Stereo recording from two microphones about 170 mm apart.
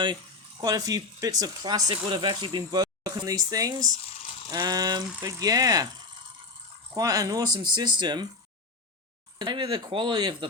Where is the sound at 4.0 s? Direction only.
35° left (ahead or behind).